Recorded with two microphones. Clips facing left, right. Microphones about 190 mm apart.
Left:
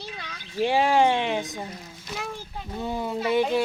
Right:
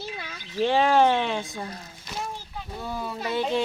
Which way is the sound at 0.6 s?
15° left (ahead or behind).